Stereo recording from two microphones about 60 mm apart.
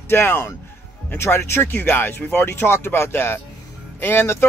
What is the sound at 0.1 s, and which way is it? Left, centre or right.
Speech, left.